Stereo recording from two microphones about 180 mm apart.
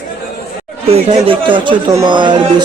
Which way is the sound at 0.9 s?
30° right (ahead or behind).